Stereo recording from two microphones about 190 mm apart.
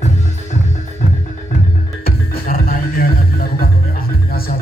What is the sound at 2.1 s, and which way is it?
Music, 50° left (ahead or behind).